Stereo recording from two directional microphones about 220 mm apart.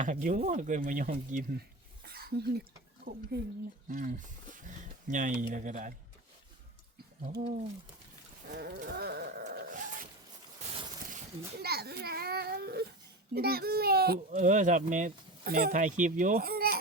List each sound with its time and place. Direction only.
0.0 s speech: 35° right (ahead or behind)
2.1 s a sound: 45° right (ahead or behind)
3.8 s speech: 40° right (ahead or behind)
7.3 s speech: 35° right (ahead or behind)
8.5 s dog: 50° right (ahead or behind)
10.6 s a sound: 30° right (ahead or behind)
11.6 s a child's voice: 45° right (ahead or behind)
14.3 s speech: 35° right (ahead or behind)